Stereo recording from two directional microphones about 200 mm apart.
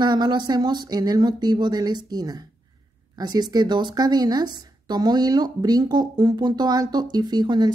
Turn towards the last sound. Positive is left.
turn(degrees=-20)  # may be behind; listen again after turning